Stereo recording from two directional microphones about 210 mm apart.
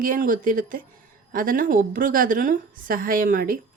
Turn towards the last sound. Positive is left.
turn(degrees=-40)  # may be behind; listen again after turning